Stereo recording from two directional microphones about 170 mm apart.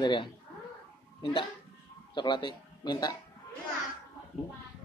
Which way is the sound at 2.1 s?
25° left (ahead or behind).